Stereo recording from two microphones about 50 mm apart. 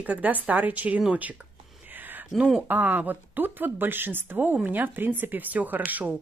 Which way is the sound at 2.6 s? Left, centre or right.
Right.